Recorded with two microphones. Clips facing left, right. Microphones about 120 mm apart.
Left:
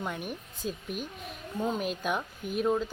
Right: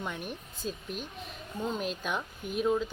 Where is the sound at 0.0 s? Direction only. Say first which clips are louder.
Left 2 dB; 5° left (ahead or behind).